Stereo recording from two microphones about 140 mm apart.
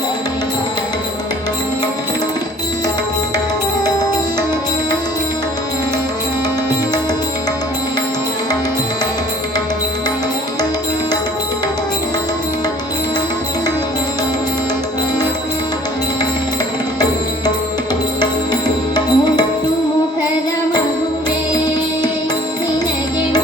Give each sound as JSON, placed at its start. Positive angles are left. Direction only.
{"t": 18.9, "sound": "music", "side_deg": 30}